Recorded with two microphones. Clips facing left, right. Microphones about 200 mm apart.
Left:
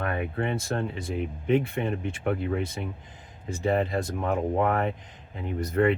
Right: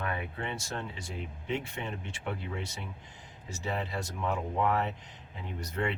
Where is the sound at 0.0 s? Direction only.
50° left (ahead or behind).